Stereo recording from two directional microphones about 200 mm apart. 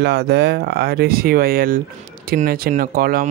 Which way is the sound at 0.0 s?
55° right (ahead or behind).